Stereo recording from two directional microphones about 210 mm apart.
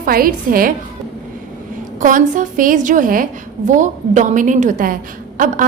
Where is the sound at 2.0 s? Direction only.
40° right (ahead or behind).